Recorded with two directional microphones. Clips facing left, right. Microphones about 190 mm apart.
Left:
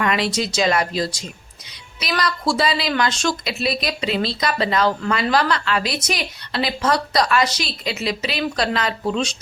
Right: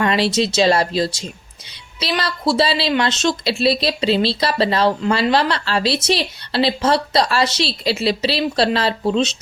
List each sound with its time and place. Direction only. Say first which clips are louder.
0.0 s a woman's voice: right 4 dB; 30° right (ahead or behind)